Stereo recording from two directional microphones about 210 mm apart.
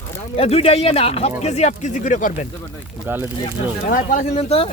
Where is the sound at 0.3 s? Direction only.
30° left (ahead or behind).